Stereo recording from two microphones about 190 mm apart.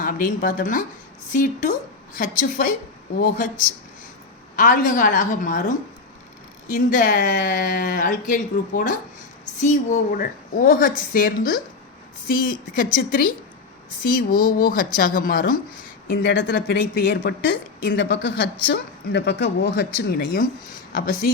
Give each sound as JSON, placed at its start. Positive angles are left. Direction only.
{"t": 0.0, "sound": "speech", "side_deg": 45}
{"t": 4.5, "sound": "speech", "side_deg": 45}
{"t": 16.2, "sound": "a woman's voice", "side_deg": 75}
{"t": 16.6, "sound": "a woman's voice", "side_deg": 55}